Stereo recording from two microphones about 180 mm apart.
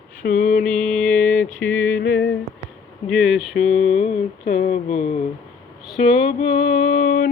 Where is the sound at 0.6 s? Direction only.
5° left (ahead or behind).